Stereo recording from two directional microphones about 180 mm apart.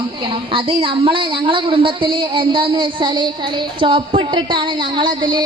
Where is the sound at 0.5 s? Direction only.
30° right (ahead or behind).